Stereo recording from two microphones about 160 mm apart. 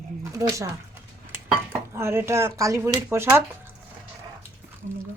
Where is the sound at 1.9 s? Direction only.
15° right (ahead or behind).